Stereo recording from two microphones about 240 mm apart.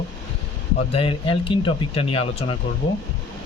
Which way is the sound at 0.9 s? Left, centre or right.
Left.